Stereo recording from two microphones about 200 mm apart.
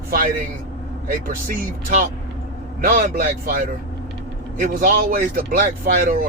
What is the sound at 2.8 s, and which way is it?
Speech, 40° right (ahead or behind).